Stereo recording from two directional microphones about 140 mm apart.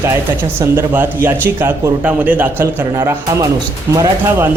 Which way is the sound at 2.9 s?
25° right (ahead or behind).